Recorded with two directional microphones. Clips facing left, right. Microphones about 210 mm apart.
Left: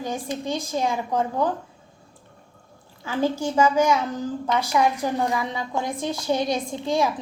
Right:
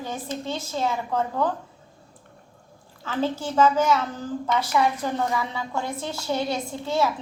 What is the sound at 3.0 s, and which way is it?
A woman's voice, 10° left (ahead or behind).